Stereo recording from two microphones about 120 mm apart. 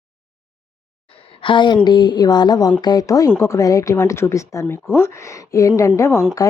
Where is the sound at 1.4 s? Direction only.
40° left (ahead or behind).